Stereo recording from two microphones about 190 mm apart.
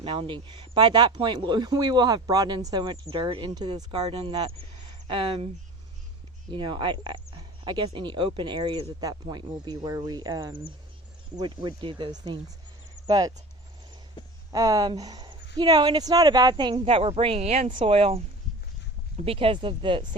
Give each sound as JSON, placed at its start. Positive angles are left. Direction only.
{"t": 0.0, "sound": "speech", "side_deg": -25}
{"t": 6.5, "sound": "speech", "side_deg": -25}
{"t": 14.5, "sound": "speech", "side_deg": -20}